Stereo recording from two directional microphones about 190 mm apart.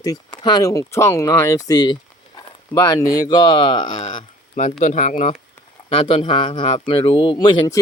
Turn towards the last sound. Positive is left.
turn(degrees=25)  # may be behind; listen again after turning